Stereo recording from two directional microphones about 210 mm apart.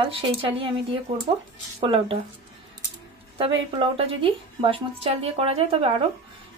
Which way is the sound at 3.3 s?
25° right (ahead or behind).